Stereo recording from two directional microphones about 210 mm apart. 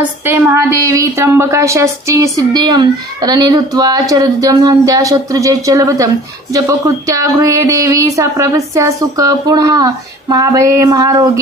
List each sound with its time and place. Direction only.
0.2 s a woman's voice: 10° right (ahead or behind)